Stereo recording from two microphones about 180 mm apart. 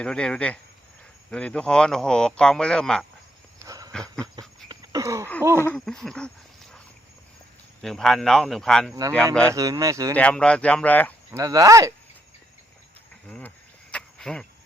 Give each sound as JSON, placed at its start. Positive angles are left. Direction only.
{"t": 0.0, "sound": "speech", "side_deg": 5}
{"t": 3.6, "sound": "a sound", "side_deg": -20}
{"t": 5.4, "sound": "speech", "side_deg": -15}
{"t": 5.7, "sound": "speech", "side_deg": 5}
{"t": 9.5, "sound": "speech", "side_deg": -20}
{"t": 10.2, "sound": "speech", "side_deg": 5}
{"t": 11.3, "sound": "speech", "side_deg": -15}
{"t": 13.2, "sound": "a sound", "side_deg": 5}
{"t": 13.9, "sound": "cricket", "side_deg": 5}